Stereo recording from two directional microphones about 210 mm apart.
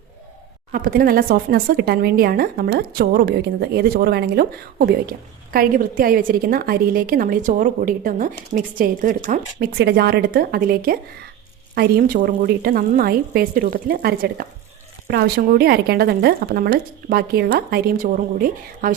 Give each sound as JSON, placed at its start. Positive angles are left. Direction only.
{"t": 0.7, "sound": "speech", "side_deg": -40}
{"t": 9.7, "sound": "speech", "side_deg": -50}